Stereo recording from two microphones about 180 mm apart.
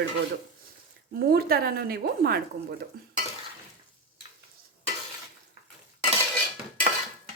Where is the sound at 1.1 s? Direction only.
60° right (ahead or behind).